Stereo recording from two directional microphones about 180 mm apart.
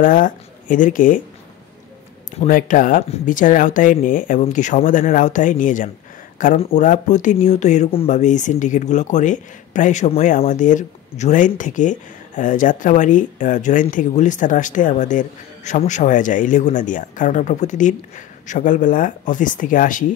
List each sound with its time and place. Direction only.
0.0 s speech: 45° left (ahead or behind)
2.4 s speech: 45° left (ahead or behind)